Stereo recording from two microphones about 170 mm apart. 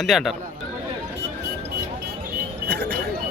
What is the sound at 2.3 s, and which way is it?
Music, 80° right.